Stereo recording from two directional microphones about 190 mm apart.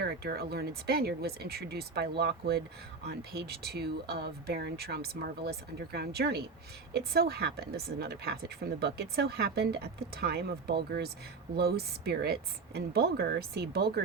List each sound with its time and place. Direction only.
0.0 s speech: 55° right (ahead or behind)